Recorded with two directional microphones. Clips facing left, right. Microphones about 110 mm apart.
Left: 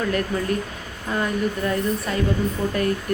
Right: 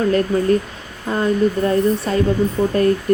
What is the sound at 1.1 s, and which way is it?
Speech, 35° right (ahead or behind).